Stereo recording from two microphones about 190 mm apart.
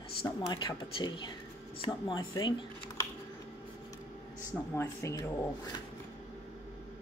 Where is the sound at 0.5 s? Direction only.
20° left (ahead or behind).